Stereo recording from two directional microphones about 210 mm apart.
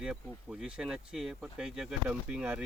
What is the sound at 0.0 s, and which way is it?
Speech, 5° right (ahead or behind).